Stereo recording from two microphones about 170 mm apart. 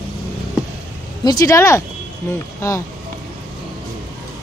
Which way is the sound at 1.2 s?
20° left (ahead or behind).